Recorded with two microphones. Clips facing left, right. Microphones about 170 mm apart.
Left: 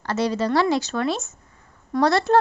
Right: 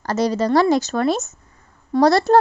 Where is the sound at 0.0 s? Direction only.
40° right (ahead or behind).